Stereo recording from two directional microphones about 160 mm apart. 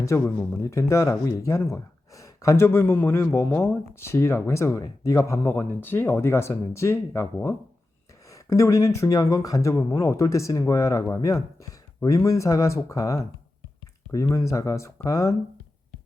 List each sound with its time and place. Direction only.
0.0 s speech: 15° left (ahead or behind)